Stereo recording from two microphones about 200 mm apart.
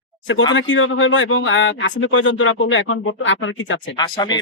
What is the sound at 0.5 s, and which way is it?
A man's voice, 70° left (ahead or behind).